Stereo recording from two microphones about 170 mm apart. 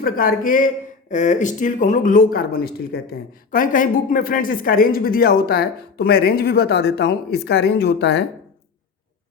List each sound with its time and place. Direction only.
0.0 s speech: 55° left (ahead or behind); by 8.2 s 75° left (ahead or behind)